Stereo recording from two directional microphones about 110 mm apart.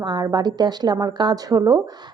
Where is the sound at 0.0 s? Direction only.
40° right (ahead or behind).